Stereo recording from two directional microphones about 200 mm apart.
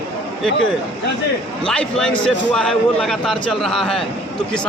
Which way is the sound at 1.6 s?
5° left (ahead or behind).